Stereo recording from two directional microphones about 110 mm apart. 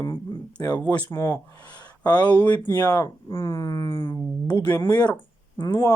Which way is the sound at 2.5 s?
40° left (ahead or behind).